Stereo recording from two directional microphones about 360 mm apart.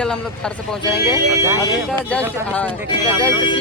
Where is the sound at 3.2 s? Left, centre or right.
Centre.